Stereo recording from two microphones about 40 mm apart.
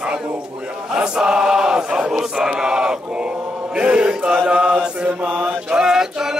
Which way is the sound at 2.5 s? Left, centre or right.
Centre.